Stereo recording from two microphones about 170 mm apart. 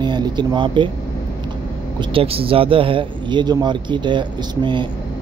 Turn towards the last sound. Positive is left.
turn(degrees=-25)  # may be behind; listen again after turning